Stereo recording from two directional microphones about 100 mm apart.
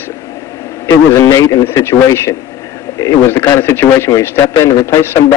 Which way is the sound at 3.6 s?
20° left (ahead or behind).